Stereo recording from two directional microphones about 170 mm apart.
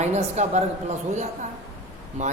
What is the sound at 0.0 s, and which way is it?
Speech, 40° right (ahead or behind).